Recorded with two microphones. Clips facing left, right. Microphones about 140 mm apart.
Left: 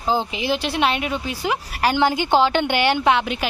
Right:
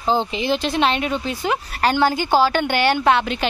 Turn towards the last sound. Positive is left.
turn(degrees=15)  # may be behind; listen again after turning